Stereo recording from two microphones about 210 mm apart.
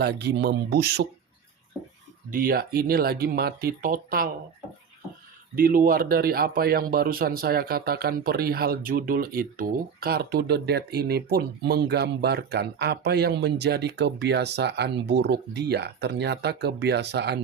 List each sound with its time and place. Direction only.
0.0 s a man's voice: 50° right (ahead or behind)
2.3 s a man's voice: 45° right (ahead or behind)
5.5 s a man's voice: 40° right (ahead or behind)